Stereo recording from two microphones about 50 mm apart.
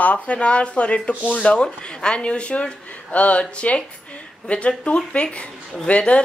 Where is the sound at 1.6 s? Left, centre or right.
Centre.